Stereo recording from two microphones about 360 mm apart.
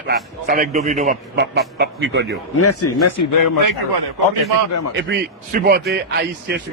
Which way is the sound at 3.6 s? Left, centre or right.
Right.